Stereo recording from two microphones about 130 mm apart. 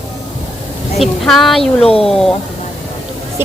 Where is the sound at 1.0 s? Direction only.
Centre (ahead or behind).